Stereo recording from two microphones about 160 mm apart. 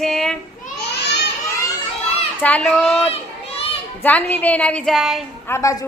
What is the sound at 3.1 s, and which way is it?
Children playing, 40° left (ahead or behind).